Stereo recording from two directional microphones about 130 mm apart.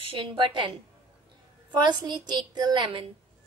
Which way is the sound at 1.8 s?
35° right (ahead or behind).